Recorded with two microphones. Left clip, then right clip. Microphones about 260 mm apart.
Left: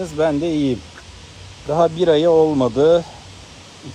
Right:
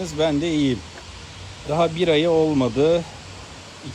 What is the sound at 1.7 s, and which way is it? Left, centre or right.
Speech, left.